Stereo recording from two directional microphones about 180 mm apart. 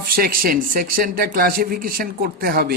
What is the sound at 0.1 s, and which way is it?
Speech, 55° right (ahead or behind).